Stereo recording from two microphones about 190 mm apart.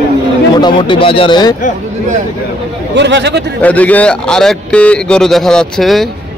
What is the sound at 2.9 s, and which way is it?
Speech, 65° right (ahead or behind).